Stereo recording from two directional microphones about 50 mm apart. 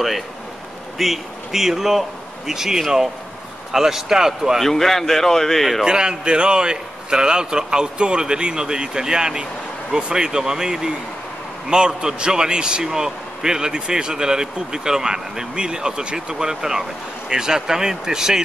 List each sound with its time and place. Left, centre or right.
0.9 s a man's voice: centre
4.6 s a man's voice: centre
5.9 s a man's voice: centre